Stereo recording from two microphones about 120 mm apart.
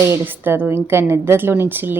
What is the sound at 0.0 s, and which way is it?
A woman's voice, 20° right (ahead or behind).